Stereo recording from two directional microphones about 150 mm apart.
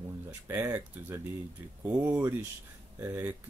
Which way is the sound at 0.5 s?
20° right (ahead or behind).